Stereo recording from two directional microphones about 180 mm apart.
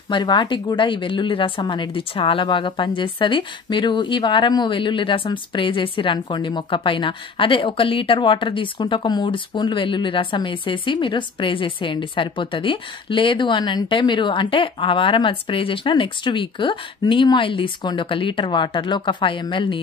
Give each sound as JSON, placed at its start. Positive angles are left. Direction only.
{"t": 0.1, "sound": "a woman's voice", "side_deg": 25}